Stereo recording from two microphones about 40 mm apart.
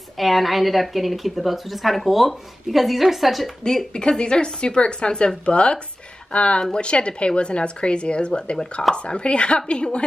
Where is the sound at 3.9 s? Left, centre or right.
Left.